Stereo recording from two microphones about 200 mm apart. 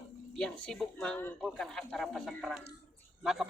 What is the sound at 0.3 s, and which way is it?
Speech, 5° left (ahead or behind).